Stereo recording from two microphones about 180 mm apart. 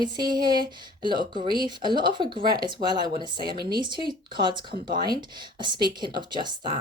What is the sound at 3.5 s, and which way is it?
Speech, 60° right (ahead or behind).